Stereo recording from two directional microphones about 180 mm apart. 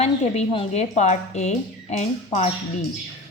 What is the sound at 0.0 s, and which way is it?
A woman's voice, 35° left (ahead or behind).